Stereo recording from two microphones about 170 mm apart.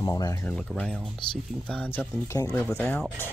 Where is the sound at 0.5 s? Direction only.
5° left (ahead or behind).